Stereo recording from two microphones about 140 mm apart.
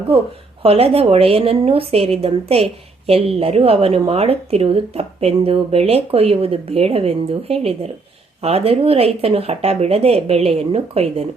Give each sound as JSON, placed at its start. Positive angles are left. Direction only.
{"t": 0.6, "sound": "a woman's voice", "side_deg": -45}